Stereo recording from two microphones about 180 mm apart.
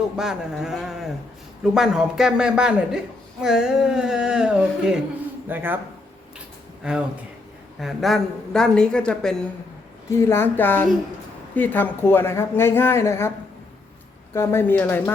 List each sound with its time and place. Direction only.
0.2 s a woman's voice: 5° right (ahead or behind)
7.8 s a woman's voice: centre (ahead or behind)
10.1 s speech: 15° left (ahead or behind)
14.3 s speech: 10° left (ahead or behind)